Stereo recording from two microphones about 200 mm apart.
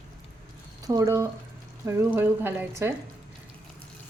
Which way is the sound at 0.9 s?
15° right (ahead or behind).